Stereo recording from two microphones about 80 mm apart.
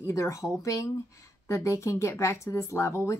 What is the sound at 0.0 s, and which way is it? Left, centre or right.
Speech, left.